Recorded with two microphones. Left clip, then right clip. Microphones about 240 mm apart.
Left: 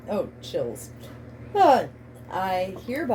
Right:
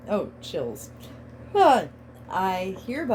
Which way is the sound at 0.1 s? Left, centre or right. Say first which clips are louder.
Even; right.